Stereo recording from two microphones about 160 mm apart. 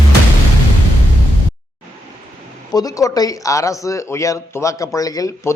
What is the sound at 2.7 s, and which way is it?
Speech, 20° left (ahead or behind).